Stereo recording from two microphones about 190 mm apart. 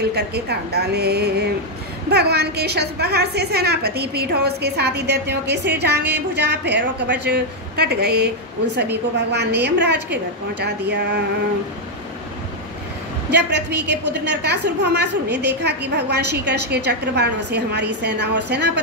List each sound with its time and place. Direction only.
0.1 s a woman's voice: 60° right (ahead or behind)
13.3 s a woman's voice: 60° right (ahead or behind)